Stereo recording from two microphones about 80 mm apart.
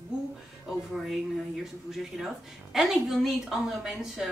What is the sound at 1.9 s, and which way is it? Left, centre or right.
A man's voice, centre.